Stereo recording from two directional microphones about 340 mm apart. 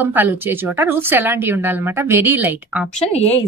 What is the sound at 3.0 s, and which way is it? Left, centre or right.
Speech, centre.